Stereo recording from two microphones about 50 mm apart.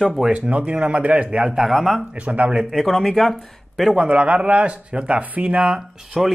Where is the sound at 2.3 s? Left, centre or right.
Right.